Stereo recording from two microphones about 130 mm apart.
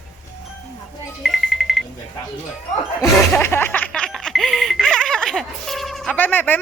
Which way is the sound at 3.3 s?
15° left (ahead or behind).